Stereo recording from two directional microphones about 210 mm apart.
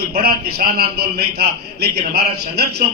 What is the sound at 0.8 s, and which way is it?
Speech, 45° right (ahead or behind).